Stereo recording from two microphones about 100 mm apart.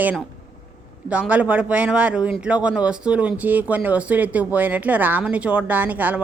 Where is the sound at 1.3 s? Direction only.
15° right (ahead or behind).